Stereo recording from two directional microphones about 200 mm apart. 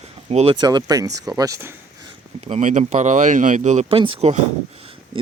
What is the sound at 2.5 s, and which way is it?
Speech, 35° right (ahead or behind).